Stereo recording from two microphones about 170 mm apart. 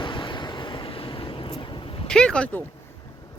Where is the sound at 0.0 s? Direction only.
30° left (ahead or behind).